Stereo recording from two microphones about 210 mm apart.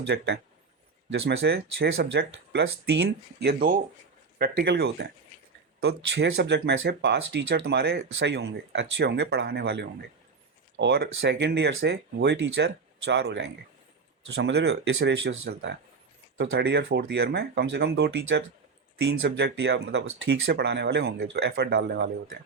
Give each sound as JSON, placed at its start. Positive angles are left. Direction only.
{"t": 0.1, "sound": "speech", "side_deg": -55}
{"t": 1.5, "sound": "speech", "side_deg": -50}
{"t": 16.4, "sound": "speech", "side_deg": -55}